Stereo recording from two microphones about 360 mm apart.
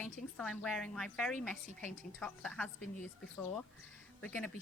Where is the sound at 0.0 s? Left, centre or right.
Centre.